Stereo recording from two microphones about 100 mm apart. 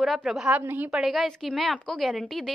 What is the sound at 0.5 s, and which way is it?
Speech, 20° right (ahead or behind).